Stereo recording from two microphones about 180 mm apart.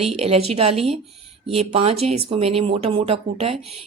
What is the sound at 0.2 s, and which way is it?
Speech, 35° right (ahead or behind).